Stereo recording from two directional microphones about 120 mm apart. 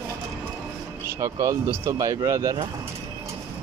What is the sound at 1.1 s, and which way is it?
Speech, 25° right (ahead or behind).